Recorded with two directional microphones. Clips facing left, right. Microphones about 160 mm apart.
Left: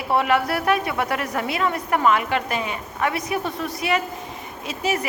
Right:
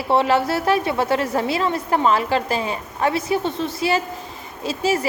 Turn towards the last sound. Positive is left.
turn(degrees=-30)  # may be behind; listen again after turning